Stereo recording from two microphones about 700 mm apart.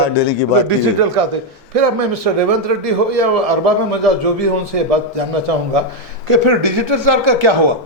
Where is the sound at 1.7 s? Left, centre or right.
Right.